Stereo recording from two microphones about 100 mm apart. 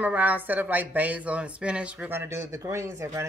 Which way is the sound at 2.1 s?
25° right (ahead or behind).